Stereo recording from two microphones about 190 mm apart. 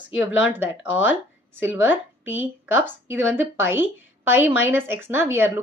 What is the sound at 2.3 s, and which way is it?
Speech, 85° left.